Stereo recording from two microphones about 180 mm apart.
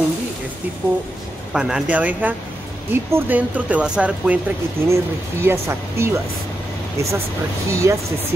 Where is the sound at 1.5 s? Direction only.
5° right (ahead or behind).